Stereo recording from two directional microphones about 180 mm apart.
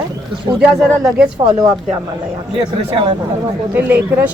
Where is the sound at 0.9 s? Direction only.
Centre (ahead or behind).